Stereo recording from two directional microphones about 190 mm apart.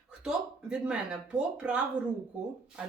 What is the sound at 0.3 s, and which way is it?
Speech, 5° right (ahead or behind).